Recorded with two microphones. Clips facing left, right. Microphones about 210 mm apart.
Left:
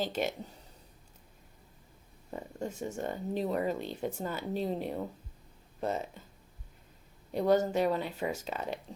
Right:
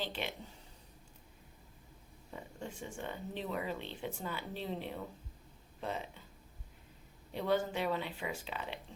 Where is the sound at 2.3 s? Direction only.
45° left (ahead or behind).